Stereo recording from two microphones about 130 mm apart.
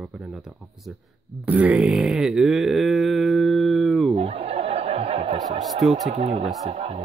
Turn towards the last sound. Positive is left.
turn(degrees=-50)  # may be behind; listen again after turning